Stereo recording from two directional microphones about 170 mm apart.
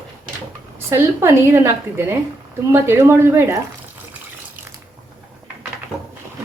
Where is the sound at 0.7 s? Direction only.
15° right (ahead or behind).